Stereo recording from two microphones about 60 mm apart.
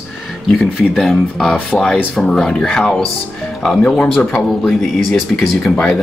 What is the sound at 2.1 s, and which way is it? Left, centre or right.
Speech, centre.